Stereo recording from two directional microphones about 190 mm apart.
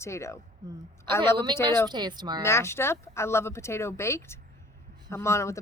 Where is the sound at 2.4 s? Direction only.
15° left (ahead or behind).